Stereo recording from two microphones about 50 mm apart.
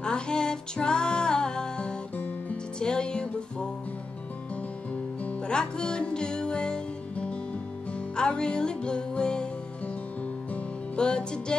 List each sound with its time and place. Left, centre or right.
0.0 s music: centre
5.5 s music: centre
11.0 s music: centre